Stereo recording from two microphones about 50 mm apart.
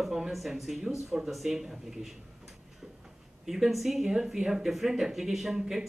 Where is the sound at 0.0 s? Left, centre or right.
Centre.